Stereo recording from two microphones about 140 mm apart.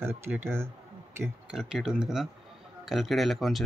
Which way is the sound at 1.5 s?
5° right (ahead or behind).